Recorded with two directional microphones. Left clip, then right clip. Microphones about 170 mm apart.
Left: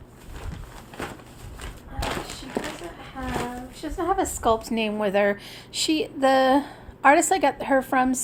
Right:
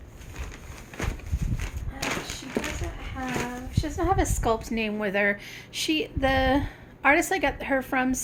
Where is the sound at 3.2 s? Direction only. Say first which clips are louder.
Left 1 dB; 10° right (ahead or behind).